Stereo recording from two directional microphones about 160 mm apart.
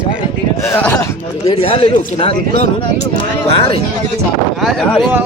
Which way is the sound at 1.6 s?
35° left (ahead or behind).